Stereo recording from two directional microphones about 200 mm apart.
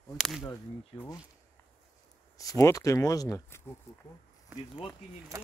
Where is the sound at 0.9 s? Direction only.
25° left (ahead or behind).